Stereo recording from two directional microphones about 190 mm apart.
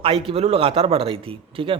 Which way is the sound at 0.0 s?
30° right (ahead or behind).